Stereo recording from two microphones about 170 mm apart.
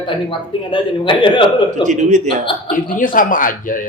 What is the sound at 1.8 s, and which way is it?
Speech, 45° right (ahead or behind).